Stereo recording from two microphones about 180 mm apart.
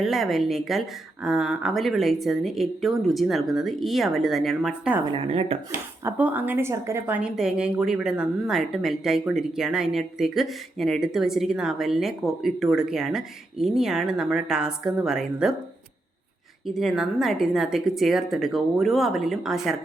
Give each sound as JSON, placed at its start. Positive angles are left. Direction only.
{"t": 0.0, "sound": "a woman's voice", "side_deg": 0}
{"t": 5.0, "sound": "a woman's voice", "side_deg": -30}
{"t": 6.1, "sound": "a woman's voice", "side_deg": -10}
{"t": 16.6, "sound": "a woman's voice", "side_deg": 0}